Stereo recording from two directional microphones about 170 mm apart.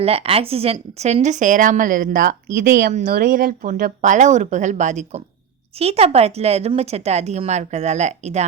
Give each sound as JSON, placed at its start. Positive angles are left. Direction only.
{"t": 0.0, "sound": "a woman's voice", "side_deg": -35}